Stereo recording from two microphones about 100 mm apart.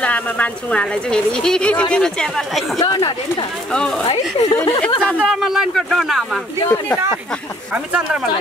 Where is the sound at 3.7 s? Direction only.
10° left (ahead or behind).